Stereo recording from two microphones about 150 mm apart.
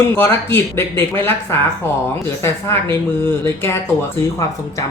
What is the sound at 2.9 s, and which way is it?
Speech, 15° left (ahead or behind).